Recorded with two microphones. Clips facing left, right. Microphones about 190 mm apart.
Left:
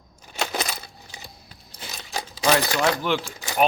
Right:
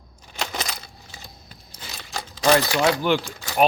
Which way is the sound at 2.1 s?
15° left (ahead or behind).